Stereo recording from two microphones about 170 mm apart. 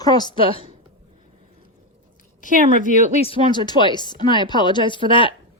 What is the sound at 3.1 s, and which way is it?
Speech, 35° left (ahead or behind).